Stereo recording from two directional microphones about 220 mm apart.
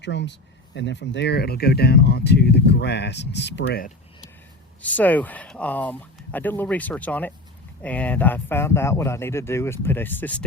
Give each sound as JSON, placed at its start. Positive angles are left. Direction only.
{"t": 0.0, "sound": "speech", "side_deg": 50}
{"t": 4.8, "sound": "speech", "side_deg": 5}